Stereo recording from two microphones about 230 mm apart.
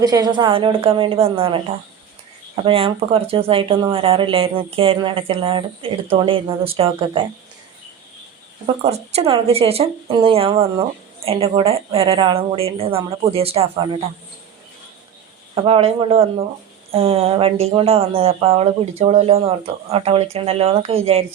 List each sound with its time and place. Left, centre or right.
0.0 s speech: centre
2.6 s speech: right
8.6 s speech: right
15.5 s speech: right